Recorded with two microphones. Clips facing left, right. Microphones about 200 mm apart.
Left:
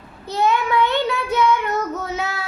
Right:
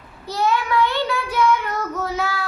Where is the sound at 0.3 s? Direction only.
20° left (ahead or behind).